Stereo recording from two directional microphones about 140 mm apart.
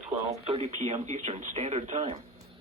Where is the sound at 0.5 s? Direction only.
50° right (ahead or behind).